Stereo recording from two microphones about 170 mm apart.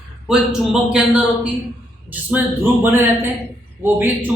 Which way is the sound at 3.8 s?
10° right (ahead or behind).